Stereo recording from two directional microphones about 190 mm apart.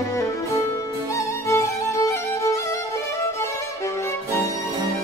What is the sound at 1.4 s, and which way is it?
Music, 15° left (ahead or behind).